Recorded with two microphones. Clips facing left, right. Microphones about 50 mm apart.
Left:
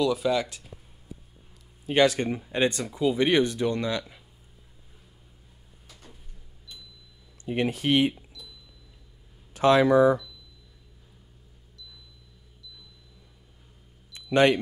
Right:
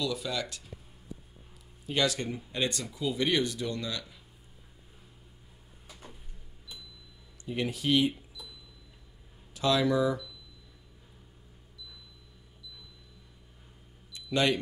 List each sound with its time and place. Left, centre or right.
0.0 s speech: left
1.9 s speech: left
5.9 s cupboard open or close: centre
7.4 s speech: left
8.4 s a sound: centre
9.5 s speech: left
14.1 s a sound: left